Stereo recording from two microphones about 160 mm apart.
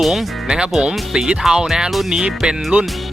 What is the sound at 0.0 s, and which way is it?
Speech, centre (ahead or behind).